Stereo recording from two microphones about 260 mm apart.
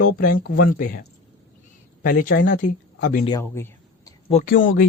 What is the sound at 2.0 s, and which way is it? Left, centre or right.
Speech, left.